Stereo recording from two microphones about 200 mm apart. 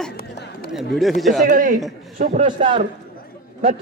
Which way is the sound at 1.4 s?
40° right (ahead or behind).